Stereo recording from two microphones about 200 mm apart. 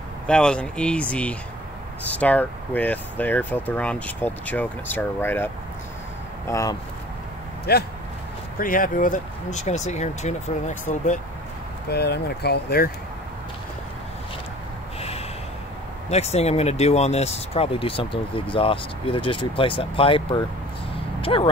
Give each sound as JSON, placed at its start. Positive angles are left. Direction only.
{"t": 0.3, "sound": "speech", "side_deg": 5}
{"t": 7.7, "sound": "speech", "side_deg": 50}
{"t": 11.9, "sound": "speech", "side_deg": 55}
{"t": 15.0, "sound": "snort", "side_deg": 30}
{"t": 16.1, "sound": "speech", "side_deg": 30}